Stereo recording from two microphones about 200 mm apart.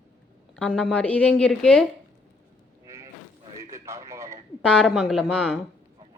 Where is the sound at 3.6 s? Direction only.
15° right (ahead or behind).